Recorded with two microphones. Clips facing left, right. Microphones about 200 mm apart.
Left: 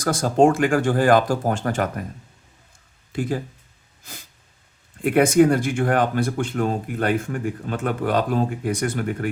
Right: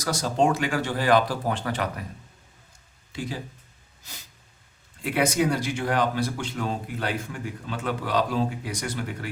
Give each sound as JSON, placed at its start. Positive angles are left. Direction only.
{"t": 0.0, "sound": "speech", "side_deg": 50}
{"t": 3.1, "sound": "speech", "side_deg": 50}
{"t": 4.0, "sound": "snort", "side_deg": 50}
{"t": 5.0, "sound": "speech", "side_deg": 50}